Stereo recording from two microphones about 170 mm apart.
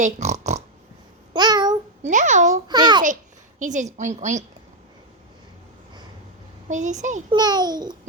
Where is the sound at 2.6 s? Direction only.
25° right (ahead or behind).